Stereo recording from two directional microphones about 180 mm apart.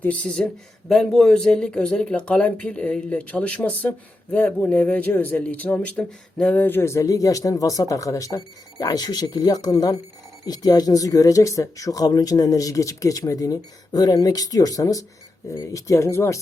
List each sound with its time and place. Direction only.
0.0 s speech: 10° left (ahead or behind)